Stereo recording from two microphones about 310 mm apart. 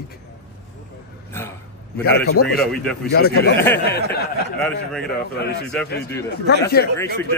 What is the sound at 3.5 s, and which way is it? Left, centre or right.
Speech, centre.